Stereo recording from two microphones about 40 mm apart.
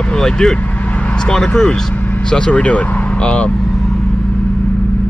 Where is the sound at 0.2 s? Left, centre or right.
Centre.